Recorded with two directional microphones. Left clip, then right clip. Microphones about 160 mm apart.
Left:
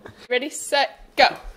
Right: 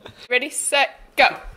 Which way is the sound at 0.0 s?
25° left (ahead or behind).